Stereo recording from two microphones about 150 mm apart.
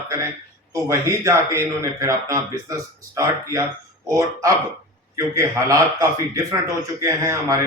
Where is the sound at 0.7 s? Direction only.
20° right (ahead or behind).